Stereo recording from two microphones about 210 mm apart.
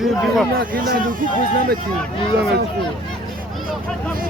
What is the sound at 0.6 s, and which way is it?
Speech, 40° right (ahead or behind).